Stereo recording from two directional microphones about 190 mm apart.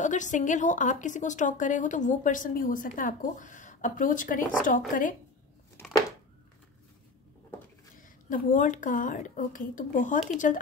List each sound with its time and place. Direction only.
0.0 s a woman's voice: 40° left (ahead or behind)
8.0 s a woman's voice: 45° left (ahead or behind)